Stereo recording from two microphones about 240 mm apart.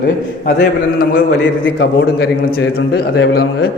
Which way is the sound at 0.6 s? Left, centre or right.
Left.